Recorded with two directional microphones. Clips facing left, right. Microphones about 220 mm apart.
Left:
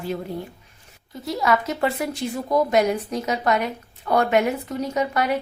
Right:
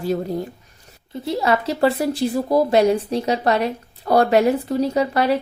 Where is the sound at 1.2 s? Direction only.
30° right (ahead or behind).